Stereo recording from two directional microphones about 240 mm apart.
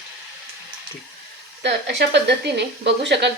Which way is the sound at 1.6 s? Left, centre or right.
Right.